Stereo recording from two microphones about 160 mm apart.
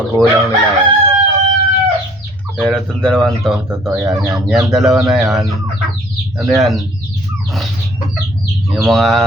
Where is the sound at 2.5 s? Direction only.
5° left (ahead or behind).